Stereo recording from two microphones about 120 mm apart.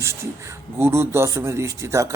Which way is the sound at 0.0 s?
25° right (ahead or behind).